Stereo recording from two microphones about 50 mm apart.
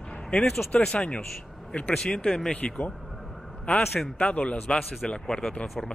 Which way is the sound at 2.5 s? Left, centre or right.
Left.